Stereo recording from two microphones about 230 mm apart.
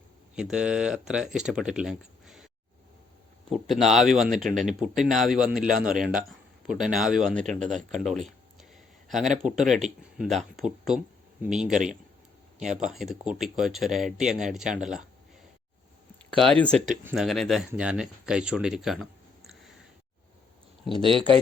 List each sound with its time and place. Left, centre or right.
0.3 s speech: centre
3.5 s speech: centre
12.9 s speech: centre
16.3 s speech: centre
16.7 s speech: right
17.0 s speech: centre
21.0 s speech: right